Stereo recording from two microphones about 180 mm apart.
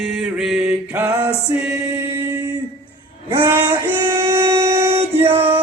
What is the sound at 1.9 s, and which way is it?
Singing, 15° right (ahead or behind).